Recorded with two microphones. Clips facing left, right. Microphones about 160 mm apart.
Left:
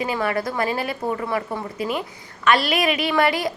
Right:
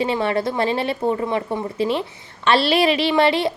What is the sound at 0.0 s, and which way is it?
A woman's voice, 25° right (ahead or behind).